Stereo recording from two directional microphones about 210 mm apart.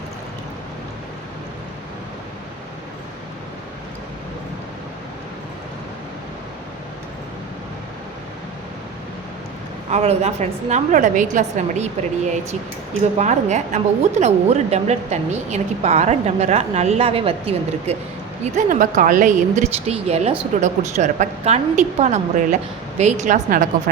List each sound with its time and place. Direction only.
9.9 s a woman's voice: 30° right (ahead or behind)